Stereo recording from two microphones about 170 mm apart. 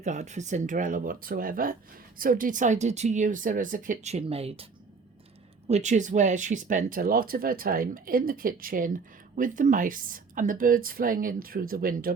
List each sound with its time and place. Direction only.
0.0 s speech: 45° right (ahead or behind)
5.6 s speech: 40° right (ahead or behind); by 12.1 s 60° right (ahead or behind)